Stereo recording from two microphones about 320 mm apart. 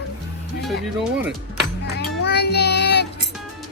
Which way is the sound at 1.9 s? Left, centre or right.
Left.